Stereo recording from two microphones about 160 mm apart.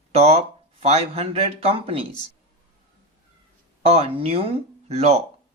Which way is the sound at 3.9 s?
40° right (ahead or behind).